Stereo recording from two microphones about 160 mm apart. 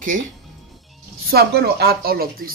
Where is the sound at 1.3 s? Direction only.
85° right; by 2.5 s 70° right (ahead or behind).